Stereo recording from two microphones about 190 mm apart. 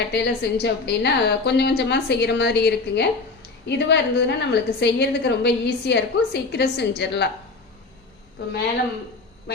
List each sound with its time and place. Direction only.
0.1 s a woman's voice: 60° left (ahead or behind)